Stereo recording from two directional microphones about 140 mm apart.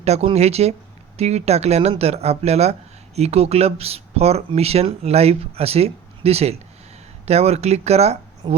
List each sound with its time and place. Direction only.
0.0 s speech: 50° right (ahead or behind)